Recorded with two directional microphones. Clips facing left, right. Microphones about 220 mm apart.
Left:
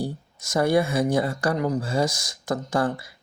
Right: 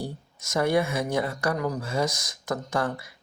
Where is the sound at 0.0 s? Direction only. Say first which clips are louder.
Left 5 dB; 30° left (ahead or behind).